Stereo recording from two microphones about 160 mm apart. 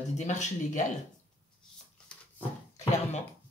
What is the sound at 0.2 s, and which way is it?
Speech, 50° left (ahead or behind).